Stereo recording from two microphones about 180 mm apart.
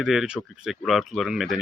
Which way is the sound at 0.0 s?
Centre (ahead or behind).